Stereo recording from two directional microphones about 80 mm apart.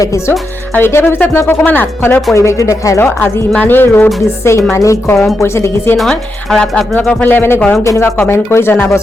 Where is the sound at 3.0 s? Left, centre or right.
Left.